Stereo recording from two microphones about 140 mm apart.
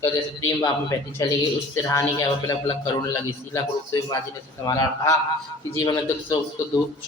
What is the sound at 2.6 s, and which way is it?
Speech, 40° left (ahead or behind).